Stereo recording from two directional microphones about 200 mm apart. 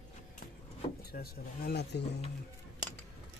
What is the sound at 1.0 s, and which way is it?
Speech, 50° left (ahead or behind).